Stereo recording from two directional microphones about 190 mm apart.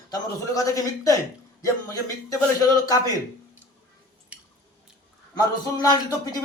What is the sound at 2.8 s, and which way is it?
Speech, 20° left (ahead or behind).